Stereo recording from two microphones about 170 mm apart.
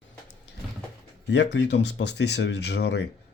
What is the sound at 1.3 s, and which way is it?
Speech, 90° left.